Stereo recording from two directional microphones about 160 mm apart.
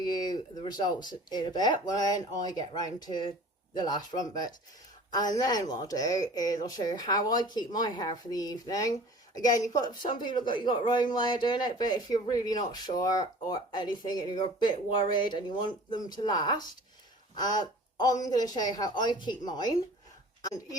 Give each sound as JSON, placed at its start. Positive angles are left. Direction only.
{"t": 0.0, "sound": "speech", "side_deg": 25}